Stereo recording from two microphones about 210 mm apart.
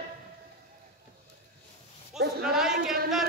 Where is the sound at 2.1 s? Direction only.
50° right (ahead or behind).